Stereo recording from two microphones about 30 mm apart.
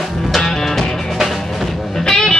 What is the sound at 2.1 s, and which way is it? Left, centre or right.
Music, centre.